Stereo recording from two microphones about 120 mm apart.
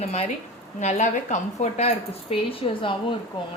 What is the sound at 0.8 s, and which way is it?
A woman's voice, 80° left.